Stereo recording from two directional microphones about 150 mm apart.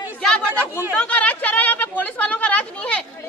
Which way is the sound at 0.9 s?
10° left (ahead or behind).